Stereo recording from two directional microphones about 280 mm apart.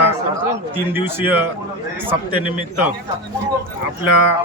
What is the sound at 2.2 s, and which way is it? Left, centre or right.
Speech, centre.